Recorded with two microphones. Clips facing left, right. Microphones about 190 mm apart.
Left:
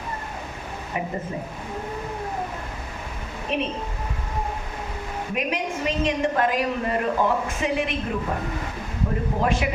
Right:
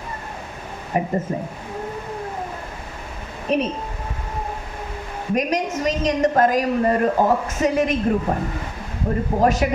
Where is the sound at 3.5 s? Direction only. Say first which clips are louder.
Right 6 dB; 40° right (ahead or behind).